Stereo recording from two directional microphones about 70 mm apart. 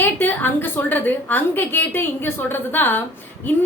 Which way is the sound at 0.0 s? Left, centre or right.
Left.